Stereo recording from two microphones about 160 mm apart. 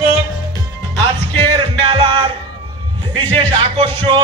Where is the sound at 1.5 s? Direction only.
35° right (ahead or behind).